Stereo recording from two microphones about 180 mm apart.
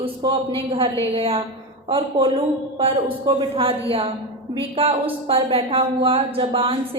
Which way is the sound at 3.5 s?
30° right (ahead or behind).